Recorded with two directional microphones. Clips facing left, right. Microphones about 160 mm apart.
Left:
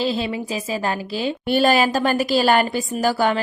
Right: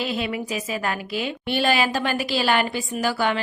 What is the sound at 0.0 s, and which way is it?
A woman's voice, 30° left (ahead or behind).